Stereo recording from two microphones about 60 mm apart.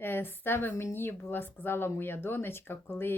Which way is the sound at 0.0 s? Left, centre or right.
Left.